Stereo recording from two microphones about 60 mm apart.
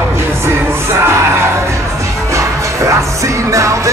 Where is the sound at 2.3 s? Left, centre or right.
Right.